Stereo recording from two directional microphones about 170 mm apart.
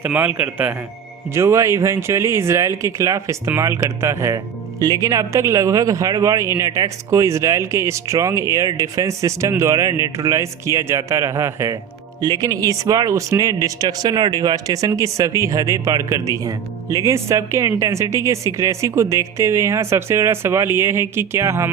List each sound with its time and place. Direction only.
0.0 s speech: 10° right (ahead or behind)